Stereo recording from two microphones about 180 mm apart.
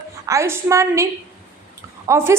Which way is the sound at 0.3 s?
15° right (ahead or behind).